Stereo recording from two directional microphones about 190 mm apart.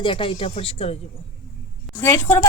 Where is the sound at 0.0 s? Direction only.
25° left (ahead or behind).